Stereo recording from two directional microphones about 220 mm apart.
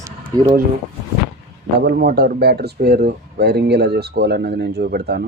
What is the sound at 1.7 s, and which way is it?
Speech, 50° right (ahead or behind).